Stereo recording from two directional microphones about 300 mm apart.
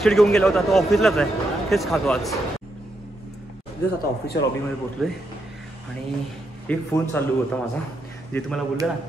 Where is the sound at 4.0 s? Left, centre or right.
Left.